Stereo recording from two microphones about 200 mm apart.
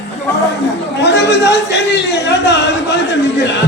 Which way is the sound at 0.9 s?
60° left (ahead or behind).